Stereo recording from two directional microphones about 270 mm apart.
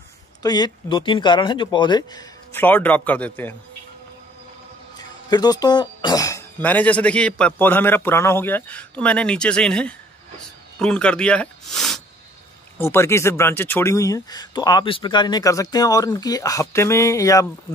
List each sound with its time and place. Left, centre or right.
0.4 s speech: centre
5.3 s speech: centre